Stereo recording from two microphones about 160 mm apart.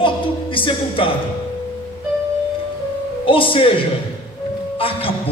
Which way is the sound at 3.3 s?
35° left (ahead or behind).